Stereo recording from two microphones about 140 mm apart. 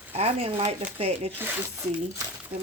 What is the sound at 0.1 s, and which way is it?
A woman's voice, 45° right (ahead or behind).